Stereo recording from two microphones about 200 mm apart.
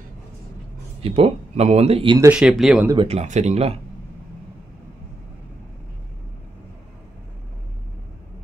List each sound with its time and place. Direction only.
1.0 s speech: 30° right (ahead or behind)
2.1 s speech: 15° right (ahead or behind)
2.4 s speech: centre (ahead or behind)
2.9 s speech: 25° right (ahead or behind)